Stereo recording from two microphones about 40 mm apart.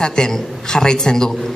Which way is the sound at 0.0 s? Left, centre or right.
Centre.